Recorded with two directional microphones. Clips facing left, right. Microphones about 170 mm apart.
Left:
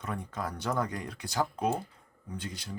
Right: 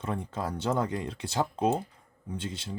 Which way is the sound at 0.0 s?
25° right (ahead or behind).